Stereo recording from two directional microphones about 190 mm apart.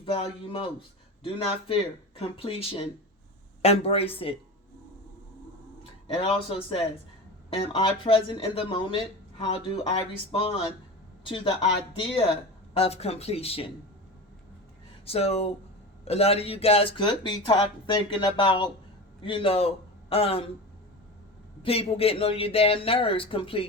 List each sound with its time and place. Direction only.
0.0 s speech: 30° left (ahead or behind)
6.1 s speech: 30° left (ahead or behind)
15.0 s a man's voice: 30° left (ahead or behind)
21.6 s speech: 30° left (ahead or behind)